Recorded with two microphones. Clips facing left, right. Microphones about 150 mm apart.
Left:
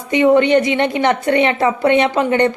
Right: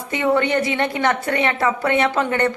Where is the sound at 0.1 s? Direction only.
20° left (ahead or behind).